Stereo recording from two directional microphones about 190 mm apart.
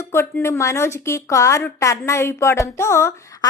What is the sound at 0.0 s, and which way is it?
A woman's voice, 15° left (ahead or behind).